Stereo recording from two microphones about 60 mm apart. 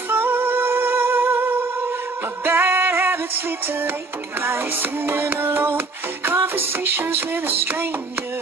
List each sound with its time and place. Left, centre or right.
0.1 s music: right